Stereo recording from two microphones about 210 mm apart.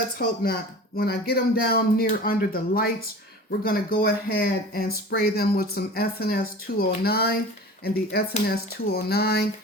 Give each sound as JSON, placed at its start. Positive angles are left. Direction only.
{"t": 0.2, "sound": "speech", "side_deg": 45}